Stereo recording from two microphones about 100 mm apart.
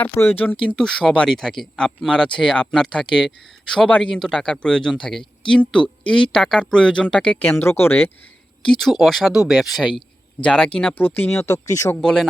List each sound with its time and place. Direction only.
0.2 s speech: 20° left (ahead or behind)
0.8 s speech: 5° left (ahead or behind)
7.5 s speech: 25° left (ahead or behind)
8.8 s speech: centre (ahead or behind); by 11.4 s 20° left (ahead or behind)
11.4 s speech: 30° left (ahead or behind)
12.0 s speech: centre (ahead or behind)